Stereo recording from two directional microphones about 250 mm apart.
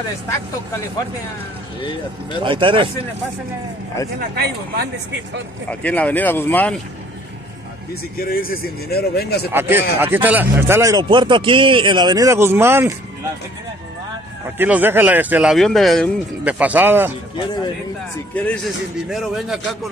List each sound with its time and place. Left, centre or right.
1.8 s speech: centre
2.4 s speech: centre
4.2 s speech: right
5.7 s speech: centre
7.9 s speech: left
9.5 s a man's voice: centre
14.6 s speech: centre
18.3 s speech: centre